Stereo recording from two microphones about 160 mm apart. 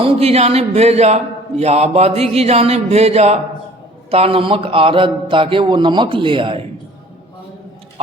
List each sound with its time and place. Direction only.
0.0 s speech: 40° right (ahead or behind)